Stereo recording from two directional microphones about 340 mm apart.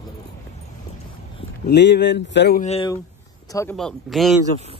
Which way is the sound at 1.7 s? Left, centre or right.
Left.